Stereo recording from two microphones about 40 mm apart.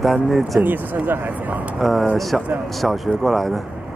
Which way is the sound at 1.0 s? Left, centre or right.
Right.